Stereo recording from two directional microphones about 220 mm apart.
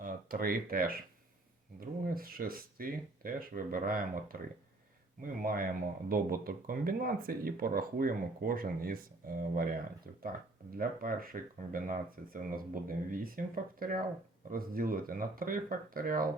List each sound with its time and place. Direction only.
0.0 s speech: 40° right (ahead or behind)
10.7 s speech: 40° right (ahead or behind)